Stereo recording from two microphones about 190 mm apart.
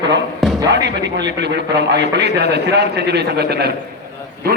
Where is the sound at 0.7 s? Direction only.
65° right (ahead or behind).